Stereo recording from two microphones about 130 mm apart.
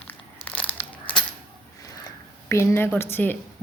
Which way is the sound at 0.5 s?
15° left (ahead or behind).